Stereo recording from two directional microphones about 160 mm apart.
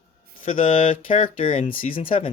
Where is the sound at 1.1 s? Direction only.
35° left (ahead or behind).